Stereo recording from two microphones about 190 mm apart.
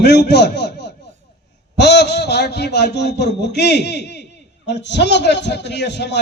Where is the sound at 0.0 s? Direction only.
60° left (ahead or behind).